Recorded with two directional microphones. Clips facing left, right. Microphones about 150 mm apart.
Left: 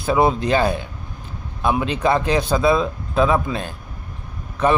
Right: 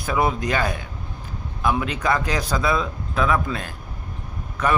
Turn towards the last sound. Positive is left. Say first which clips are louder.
# left 4 dB
turn(degrees=25)  # may be behind; listen again after turning